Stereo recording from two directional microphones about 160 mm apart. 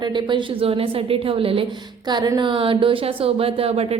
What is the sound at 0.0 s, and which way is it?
A woman's voice, 30° right (ahead or behind).